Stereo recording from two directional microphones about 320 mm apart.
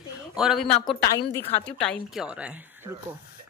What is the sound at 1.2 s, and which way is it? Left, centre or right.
Speech, centre.